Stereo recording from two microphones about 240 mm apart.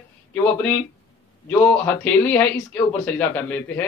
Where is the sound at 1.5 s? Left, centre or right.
Centre.